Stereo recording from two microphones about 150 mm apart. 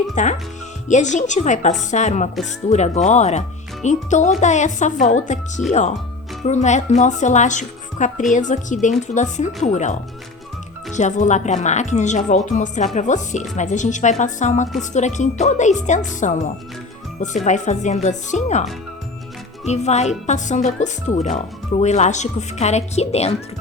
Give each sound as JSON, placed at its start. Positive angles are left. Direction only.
{"t": 0.1, "sound": "speech", "side_deg": 50}